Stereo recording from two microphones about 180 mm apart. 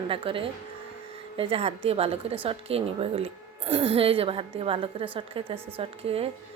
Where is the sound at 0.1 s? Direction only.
30° right (ahead or behind).